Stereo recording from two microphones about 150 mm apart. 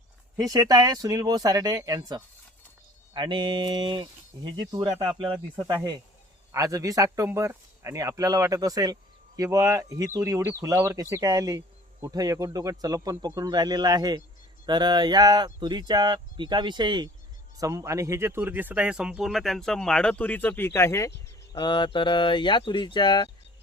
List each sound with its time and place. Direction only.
0.3 s speech: 25° right (ahead or behind); by 21.1 s 20° left (ahead or behind)
21.5 s speech: 30° left (ahead or behind)